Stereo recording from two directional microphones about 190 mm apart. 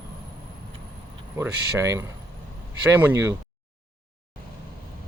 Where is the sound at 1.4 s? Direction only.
15° right (ahead or behind).